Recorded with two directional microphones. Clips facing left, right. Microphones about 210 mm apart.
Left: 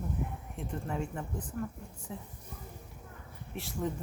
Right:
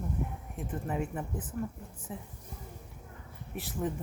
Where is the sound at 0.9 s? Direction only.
5° right (ahead or behind).